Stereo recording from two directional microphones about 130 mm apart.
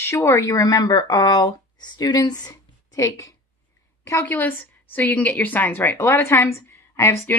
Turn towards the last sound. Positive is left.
turn(degrees=20)  # may be behind; listen again after turning